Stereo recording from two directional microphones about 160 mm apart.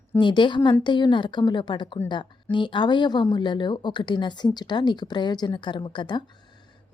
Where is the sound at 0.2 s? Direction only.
30° left (ahead or behind).